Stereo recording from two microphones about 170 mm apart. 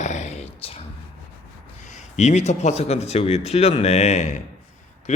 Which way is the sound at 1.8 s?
45° left (ahead or behind).